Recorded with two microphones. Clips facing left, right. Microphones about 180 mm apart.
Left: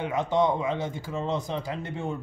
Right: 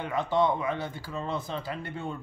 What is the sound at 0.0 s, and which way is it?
A man's voice, 20° left (ahead or behind).